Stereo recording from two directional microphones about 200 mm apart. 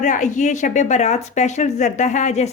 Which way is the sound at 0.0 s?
40° left (ahead or behind).